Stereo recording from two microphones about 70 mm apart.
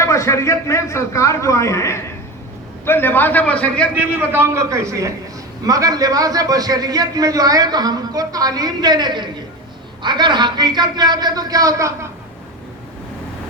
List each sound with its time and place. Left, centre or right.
0.0 s a man's voice: left
2.8 s a man's voice: left
4.2 s a man's voice: right
5.6 s a man's voice: right